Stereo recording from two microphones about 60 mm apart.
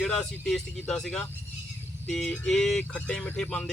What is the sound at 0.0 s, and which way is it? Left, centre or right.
Speech, centre.